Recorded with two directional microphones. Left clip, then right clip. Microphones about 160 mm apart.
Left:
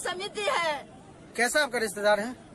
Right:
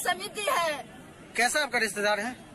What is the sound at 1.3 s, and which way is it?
Speech, 15° left (ahead or behind).